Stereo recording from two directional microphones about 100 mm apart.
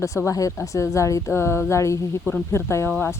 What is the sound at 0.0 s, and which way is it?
A woman's voice, 30° left (ahead or behind).